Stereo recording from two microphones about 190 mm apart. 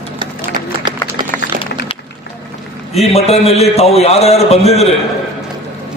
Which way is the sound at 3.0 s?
30° left (ahead or behind).